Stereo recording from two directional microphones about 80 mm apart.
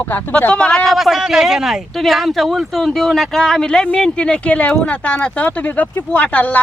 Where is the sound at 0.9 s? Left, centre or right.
Centre.